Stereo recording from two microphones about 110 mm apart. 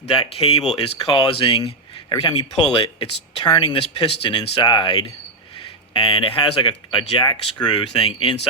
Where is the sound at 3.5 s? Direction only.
45° left (ahead or behind).